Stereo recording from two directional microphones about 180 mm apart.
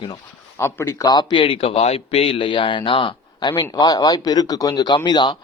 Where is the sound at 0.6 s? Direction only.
15° left (ahead or behind).